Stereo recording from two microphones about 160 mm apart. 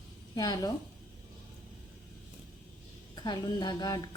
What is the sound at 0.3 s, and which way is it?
Speech, 25° left (ahead or behind).